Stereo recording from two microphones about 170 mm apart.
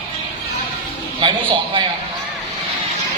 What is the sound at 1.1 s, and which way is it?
Speech, 30° right (ahead or behind).